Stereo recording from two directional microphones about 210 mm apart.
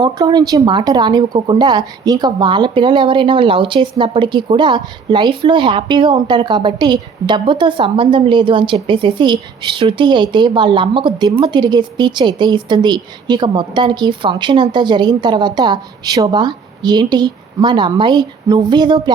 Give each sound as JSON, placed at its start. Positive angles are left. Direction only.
{"t": 0.0, "sound": "speech", "side_deg": -20}